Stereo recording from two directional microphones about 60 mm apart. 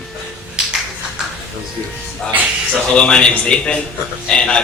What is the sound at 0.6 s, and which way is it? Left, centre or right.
Finger snapping, centre.